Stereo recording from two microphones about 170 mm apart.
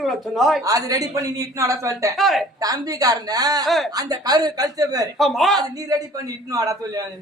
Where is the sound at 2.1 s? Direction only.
Centre (ahead or behind).